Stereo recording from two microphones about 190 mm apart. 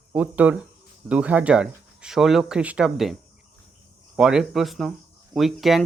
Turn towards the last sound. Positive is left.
turn(degrees=0)  # may be behind; listen again after turning